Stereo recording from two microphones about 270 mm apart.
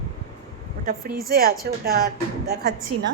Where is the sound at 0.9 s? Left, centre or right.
Right.